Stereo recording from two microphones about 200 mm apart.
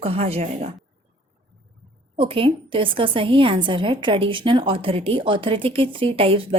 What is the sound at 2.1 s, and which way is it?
A woman's voice, 25° right (ahead or behind).